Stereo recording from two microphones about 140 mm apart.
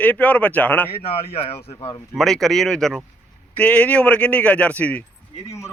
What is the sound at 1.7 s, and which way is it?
Speech, 30° left (ahead or behind).